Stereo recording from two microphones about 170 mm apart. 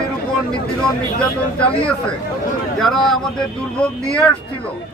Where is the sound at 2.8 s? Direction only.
Centre (ahead or behind).